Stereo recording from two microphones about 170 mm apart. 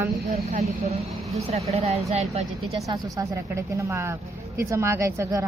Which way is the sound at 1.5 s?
40° right (ahead or behind).